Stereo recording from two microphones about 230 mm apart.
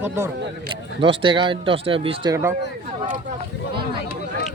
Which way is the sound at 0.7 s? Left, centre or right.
Right.